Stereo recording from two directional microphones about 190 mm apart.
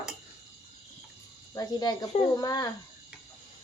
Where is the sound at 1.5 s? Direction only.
20° left (ahead or behind).